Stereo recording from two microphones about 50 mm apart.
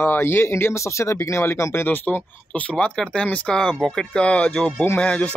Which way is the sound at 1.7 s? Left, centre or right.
Left.